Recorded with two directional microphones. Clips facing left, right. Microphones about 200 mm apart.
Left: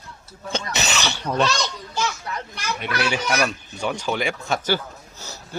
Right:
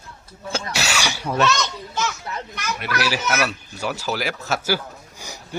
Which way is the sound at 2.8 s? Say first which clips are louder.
Even; 5° right (ahead or behind).